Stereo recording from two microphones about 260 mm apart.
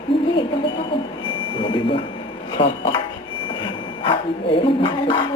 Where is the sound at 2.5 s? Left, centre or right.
Centre.